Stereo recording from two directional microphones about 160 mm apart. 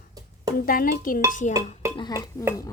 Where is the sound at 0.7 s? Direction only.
60° left (ahead or behind).